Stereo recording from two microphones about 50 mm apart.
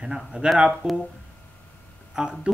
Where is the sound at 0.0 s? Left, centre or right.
Centre.